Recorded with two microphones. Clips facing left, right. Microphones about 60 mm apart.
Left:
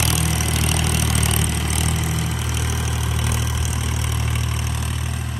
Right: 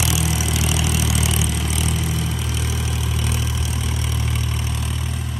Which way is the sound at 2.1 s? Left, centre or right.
Left.